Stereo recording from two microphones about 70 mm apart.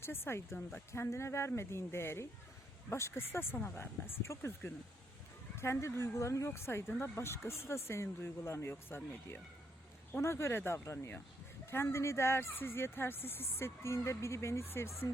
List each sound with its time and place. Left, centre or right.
0.0 s speech: left
5.8 s speech: left
10.2 s speech: left